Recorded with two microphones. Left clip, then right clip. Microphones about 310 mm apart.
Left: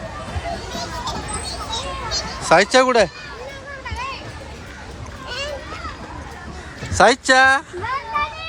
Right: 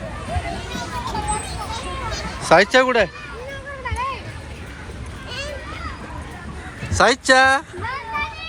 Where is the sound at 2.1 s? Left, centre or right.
Centre.